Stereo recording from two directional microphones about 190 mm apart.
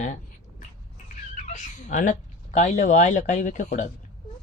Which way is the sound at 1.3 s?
40° left (ahead or behind).